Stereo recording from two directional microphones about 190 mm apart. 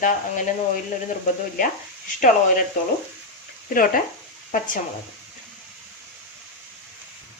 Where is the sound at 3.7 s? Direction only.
50° left (ahead or behind).